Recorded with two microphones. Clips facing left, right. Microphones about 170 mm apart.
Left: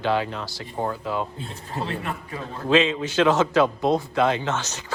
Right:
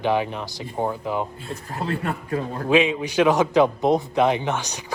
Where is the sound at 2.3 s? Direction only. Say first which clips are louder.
Right 7 dB; 55° right (ahead or behind).